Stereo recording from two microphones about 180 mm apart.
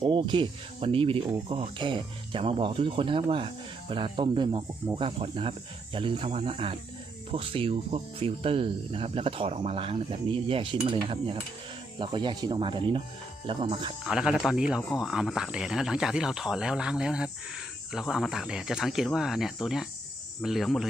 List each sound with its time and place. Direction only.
0.0 s speech: 25° right (ahead or behind)
14.0 s speech: 5° right (ahead or behind)